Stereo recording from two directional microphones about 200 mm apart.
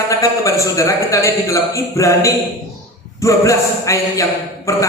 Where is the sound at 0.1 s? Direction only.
15° left (ahead or behind).